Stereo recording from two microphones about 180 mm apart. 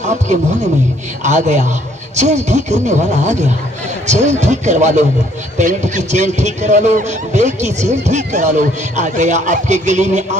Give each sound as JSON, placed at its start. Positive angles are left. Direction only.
{"t": 1.2, "sound": "a man's voice", "side_deg": -40}